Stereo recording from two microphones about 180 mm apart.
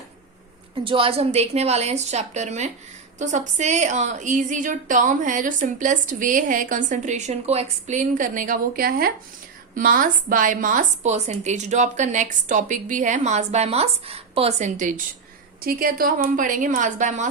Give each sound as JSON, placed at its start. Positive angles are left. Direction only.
{"t": 0.9, "sound": "a woman's voice", "side_deg": -30}